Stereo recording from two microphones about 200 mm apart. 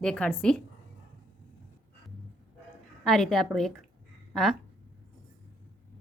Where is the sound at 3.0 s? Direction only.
Centre (ahead or behind).